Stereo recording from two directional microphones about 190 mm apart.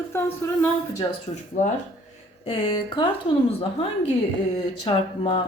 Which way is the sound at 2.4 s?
25° left (ahead or behind).